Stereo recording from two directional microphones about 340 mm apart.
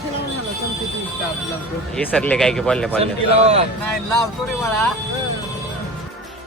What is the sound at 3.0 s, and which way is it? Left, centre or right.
Speech, centre.